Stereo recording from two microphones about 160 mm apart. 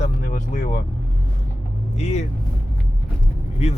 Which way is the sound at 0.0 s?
50° left (ahead or behind).